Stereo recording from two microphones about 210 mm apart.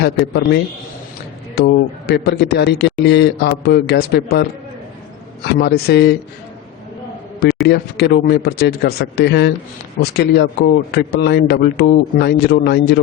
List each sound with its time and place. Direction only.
0.0 s a man's voice: 55° left (ahead or behind)
5.5 s a man's voice: 50° left (ahead or behind)
7.7 s a man's voice: 50° left (ahead or behind)